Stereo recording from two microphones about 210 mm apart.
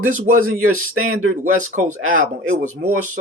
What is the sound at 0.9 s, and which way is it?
Speech, 90° right.